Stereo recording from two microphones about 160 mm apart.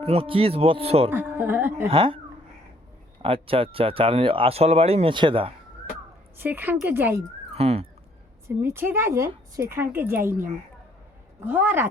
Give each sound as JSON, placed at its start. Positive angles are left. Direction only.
{"t": 0.0, "sound": "speech", "side_deg": -35}
{"t": 1.1, "sound": "a woman's voice", "side_deg": -15}
{"t": 1.9, "sound": "speech", "side_deg": -30}
{"t": 3.2, "sound": "speech", "side_deg": -35}
{"t": 6.3, "sound": "a woman's voice", "side_deg": -10}
{"t": 7.5, "sound": "speech", "side_deg": -40}
{"t": 8.4, "sound": "a woman's voice", "side_deg": -15}